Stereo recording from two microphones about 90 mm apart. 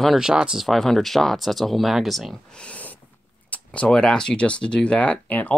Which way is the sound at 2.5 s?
15° left (ahead or behind).